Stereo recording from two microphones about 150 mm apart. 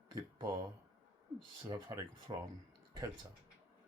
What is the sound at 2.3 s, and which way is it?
Speech, 25° right (ahead or behind).